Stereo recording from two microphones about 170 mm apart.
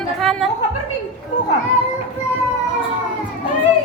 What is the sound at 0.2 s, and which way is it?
Music, centre (ahead or behind).